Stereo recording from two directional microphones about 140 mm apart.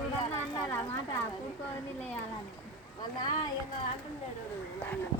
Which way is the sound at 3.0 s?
30° left (ahead or behind).